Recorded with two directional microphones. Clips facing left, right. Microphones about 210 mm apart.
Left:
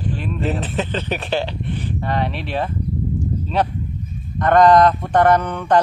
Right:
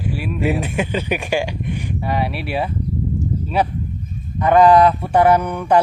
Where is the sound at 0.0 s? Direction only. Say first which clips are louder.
Right 2 dB; 10° right (ahead or behind).